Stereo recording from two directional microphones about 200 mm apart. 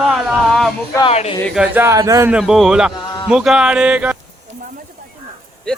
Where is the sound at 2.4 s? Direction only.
Centre (ahead or behind).